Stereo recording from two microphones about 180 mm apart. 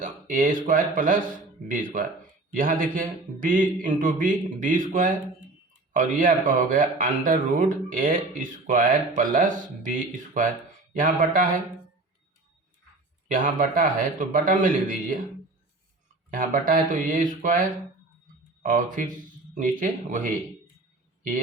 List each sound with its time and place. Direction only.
0.0 s speech: 50° right (ahead or behind)
13.2 s speech: 45° right (ahead or behind)
16.3 s speech: 50° right (ahead or behind)
18.6 s speech: 50° right (ahead or behind)